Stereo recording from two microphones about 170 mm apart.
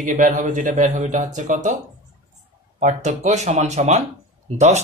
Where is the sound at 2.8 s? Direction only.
45° right (ahead or behind).